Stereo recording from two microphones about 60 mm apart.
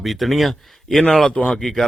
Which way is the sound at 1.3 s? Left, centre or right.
Centre.